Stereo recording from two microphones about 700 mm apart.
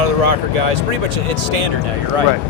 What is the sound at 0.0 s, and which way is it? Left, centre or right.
Speech, right.